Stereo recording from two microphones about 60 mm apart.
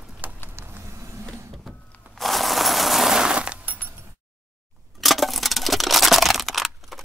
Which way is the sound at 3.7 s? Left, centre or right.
Right.